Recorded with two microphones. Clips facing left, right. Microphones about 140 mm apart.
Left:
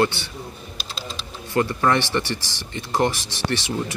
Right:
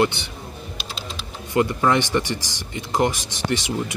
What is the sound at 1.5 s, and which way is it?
Speech, 15° right (ahead or behind).